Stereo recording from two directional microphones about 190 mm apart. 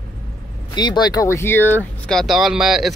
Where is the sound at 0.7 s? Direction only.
20° left (ahead or behind); by 2.9 s centre (ahead or behind).